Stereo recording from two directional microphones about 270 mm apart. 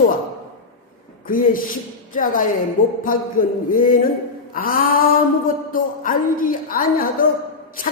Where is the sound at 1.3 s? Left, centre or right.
Left.